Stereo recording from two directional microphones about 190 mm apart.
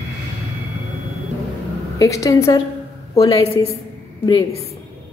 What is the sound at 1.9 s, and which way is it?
Speech, 15° left (ahead or behind).